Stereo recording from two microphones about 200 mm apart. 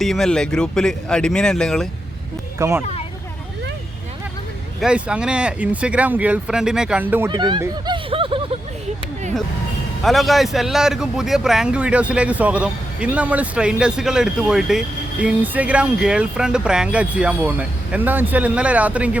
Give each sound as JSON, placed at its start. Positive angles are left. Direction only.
{"t": 0.0, "sound": "speech", "side_deg": 0}
{"t": 2.6, "sound": "speech", "side_deg": -15}
{"t": 4.8, "sound": "speech", "side_deg": -5}
{"t": 7.3, "sound": "speech", "side_deg": -20}
{"t": 10.0, "sound": "speech", "side_deg": 0}